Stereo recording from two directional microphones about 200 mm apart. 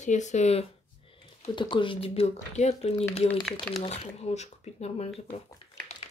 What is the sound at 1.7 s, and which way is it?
Speech, 25° left (ahead or behind).